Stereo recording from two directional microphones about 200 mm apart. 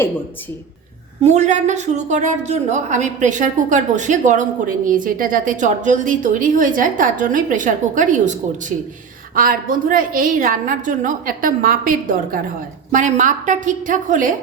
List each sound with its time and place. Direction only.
1.2 s a woman's voice: 35° right (ahead or behind)
9.3 s a woman's voice: 45° right (ahead or behind)